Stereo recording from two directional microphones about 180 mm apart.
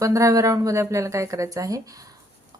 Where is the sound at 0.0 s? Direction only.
20° right (ahead or behind).